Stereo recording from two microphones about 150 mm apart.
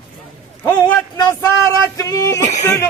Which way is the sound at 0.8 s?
25° left (ahead or behind).